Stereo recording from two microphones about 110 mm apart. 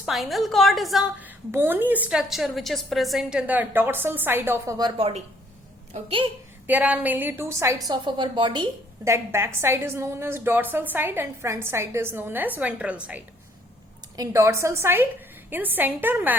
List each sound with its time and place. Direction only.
0.0 s a woman's voice: centre (ahead or behind)
1.2 s a woman's voice: 20° right (ahead or behind)
4.9 s speech: 60° right (ahead or behind)
6.7 s a woman's voice: 15° right (ahead or behind)
7.9 s a woman's voice: 45° right (ahead or behind)
9.0 s a woman's voice: 25° right (ahead or behind)
14.2 s a woman's voice: 25° right (ahead or behind)